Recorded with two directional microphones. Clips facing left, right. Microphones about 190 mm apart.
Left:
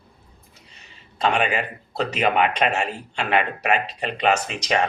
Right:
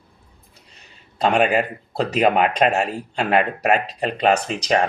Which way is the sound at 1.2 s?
40° right (ahead or behind).